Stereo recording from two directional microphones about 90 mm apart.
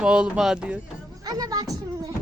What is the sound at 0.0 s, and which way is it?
Speech, 10° right (ahead or behind).